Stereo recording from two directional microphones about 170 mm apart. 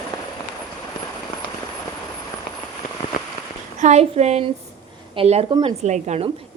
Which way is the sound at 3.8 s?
40° right (ahead or behind).